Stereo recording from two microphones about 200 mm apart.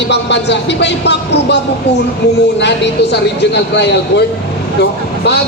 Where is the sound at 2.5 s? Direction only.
60° left (ahead or behind).